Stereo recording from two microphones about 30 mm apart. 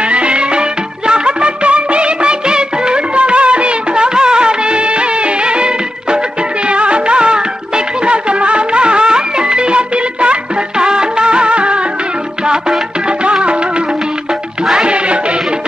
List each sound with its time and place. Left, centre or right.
0.1 s music: right
13.2 s music: right